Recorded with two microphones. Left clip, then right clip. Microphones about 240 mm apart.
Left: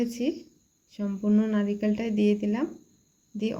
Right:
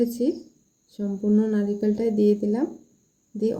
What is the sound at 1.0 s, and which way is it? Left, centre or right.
Speech, centre.